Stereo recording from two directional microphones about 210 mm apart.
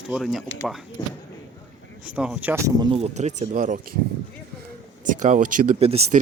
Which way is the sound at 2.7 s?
25° right (ahead or behind).